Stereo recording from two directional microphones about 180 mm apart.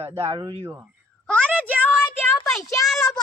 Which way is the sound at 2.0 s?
20° left (ahead or behind).